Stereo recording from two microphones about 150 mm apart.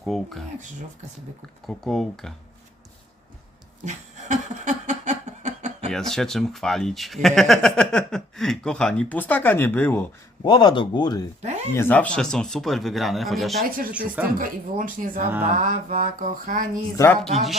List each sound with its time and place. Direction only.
0.0 s speech: centre (ahead or behind)
1.6 s speech: centre (ahead or behind)
3.8 s a sound: 50° right (ahead or behind)
5.9 s speech: 5° left (ahead or behind)
10.4 s speech: 30° left (ahead or behind)
11.8 s speech: 10° left (ahead or behind)
13.7 s speech: 70° right (ahead or behind)
13.9 s speech: 10° right (ahead or behind)
14.3 s music: 65° right (ahead or behind)